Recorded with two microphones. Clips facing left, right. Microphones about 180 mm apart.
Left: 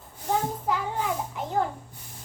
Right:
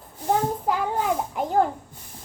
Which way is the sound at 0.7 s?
45° right (ahead or behind).